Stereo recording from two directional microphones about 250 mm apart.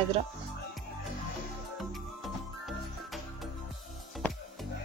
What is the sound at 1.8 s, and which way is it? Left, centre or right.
Music, centre.